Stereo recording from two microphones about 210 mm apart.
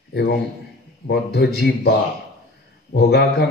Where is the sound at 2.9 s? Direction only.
50° left (ahead or behind).